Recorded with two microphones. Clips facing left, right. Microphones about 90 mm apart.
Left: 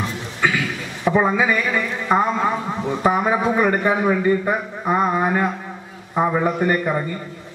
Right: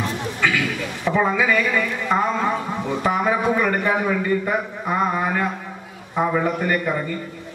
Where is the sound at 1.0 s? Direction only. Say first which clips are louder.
Left 2 dB; 20° left (ahead or behind).